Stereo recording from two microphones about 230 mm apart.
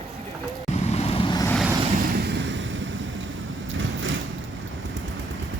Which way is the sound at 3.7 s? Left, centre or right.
Right.